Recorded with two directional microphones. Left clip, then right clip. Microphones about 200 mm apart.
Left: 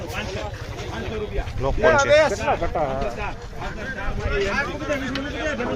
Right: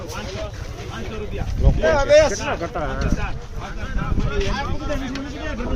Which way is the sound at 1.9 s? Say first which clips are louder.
Right 5 dB; 50° right (ahead or behind).